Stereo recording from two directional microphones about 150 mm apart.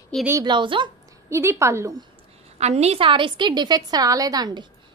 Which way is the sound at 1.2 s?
20° right (ahead or behind).